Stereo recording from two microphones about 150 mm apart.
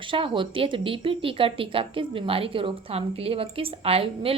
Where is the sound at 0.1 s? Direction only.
35° right (ahead or behind).